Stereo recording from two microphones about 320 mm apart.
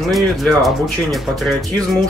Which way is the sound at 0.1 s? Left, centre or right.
Centre.